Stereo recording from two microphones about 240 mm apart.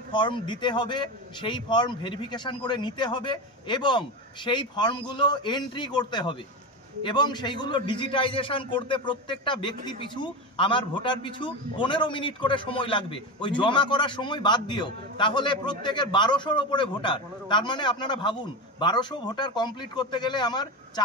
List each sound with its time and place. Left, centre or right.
0.1 s a man's voice: centre